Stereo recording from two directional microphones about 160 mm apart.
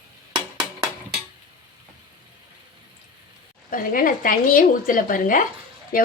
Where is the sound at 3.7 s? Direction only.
60° left (ahead or behind).